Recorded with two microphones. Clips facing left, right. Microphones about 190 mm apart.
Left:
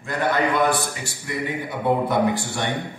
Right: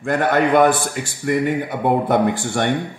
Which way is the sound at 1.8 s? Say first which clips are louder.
Right 2 dB; 55° right (ahead or behind).